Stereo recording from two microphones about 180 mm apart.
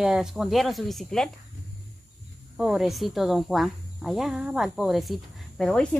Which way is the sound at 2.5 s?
Centre (ahead or behind).